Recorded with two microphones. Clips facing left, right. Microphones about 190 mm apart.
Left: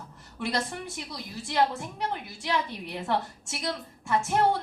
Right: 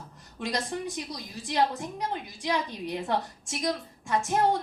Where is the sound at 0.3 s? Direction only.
15° right (ahead or behind).